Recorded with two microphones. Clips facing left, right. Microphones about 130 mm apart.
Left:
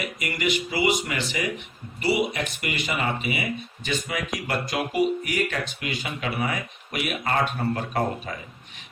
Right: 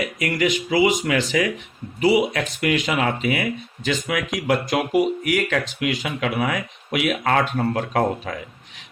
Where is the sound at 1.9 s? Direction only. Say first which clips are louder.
Right 6 dB; 90° right.